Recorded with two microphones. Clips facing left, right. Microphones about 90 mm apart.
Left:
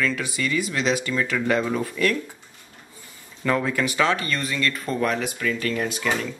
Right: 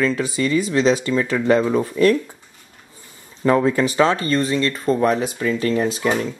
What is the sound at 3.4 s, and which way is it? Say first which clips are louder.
Speech: right 7 dB; 30° right (ahead or behind).